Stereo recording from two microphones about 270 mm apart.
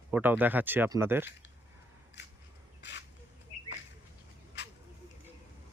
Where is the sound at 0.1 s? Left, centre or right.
Centre.